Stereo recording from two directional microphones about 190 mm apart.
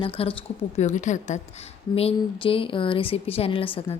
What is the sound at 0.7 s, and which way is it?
A woman's voice, 40° left (ahead or behind).